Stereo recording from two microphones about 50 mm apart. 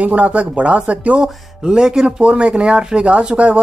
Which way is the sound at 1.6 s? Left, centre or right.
Centre.